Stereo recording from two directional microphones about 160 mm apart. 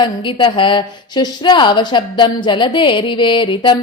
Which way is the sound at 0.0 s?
30° left (ahead or behind).